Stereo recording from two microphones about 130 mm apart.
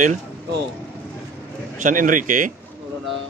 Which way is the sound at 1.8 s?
90° right.